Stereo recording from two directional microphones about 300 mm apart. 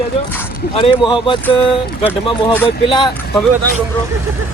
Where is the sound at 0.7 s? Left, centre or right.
Centre.